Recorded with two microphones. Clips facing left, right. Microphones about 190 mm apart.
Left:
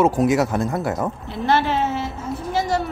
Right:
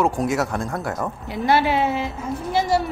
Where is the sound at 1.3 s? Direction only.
10° right (ahead or behind).